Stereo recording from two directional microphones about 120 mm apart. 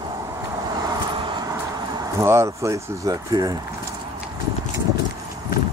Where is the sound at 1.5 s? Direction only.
25° right (ahead or behind).